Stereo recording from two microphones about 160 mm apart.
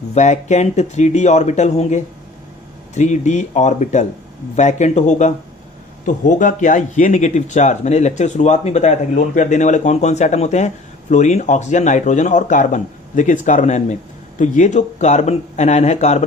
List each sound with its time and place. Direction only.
0.1 s speech: 45° left (ahead or behind)